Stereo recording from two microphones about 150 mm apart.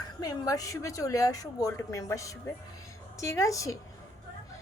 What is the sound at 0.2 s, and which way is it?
A woman's voice, 25° left (ahead or behind).